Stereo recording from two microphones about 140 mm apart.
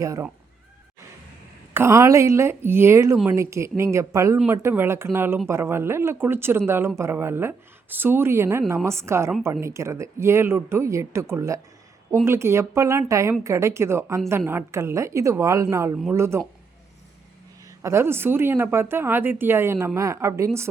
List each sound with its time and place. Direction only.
0.0 s speech: 20° right (ahead or behind)
1.7 s speech: 20° right (ahead or behind)
17.7 s speech: 20° right (ahead or behind)